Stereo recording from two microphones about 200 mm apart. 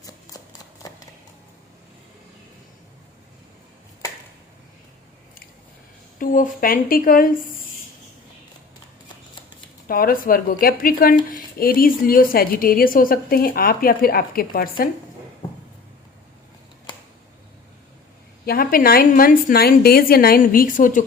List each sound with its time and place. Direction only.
0.8 s a sound: 20° left (ahead or behind)
6.1 s a woman's voice: 45° left (ahead or behind)
9.8 s a woman's voice: 45° left (ahead or behind)
18.4 s a woman's voice: 45° left (ahead or behind)